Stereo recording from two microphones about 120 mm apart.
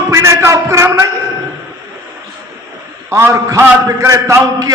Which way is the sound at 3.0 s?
20° right (ahead or behind).